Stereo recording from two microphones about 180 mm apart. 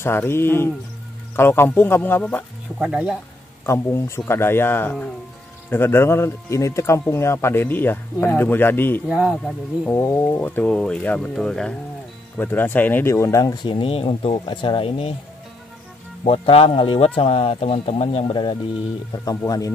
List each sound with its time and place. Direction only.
0.0 s speech: 15° left (ahead or behind)
2.8 s speech: 5° right (ahead or behind)
3.6 s speech: 15° left (ahead or behind)
9.1 s speech: 5° right (ahead or behind)
9.8 s speech: 15° left (ahead or behind); by 15.1 s 30° left (ahead or behind)
16.3 s speech: 35° left (ahead or behind)